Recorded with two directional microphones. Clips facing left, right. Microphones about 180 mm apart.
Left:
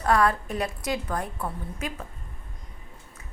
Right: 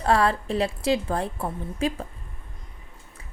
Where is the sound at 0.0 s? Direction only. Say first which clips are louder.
Right 1 dB; 30° right (ahead or behind).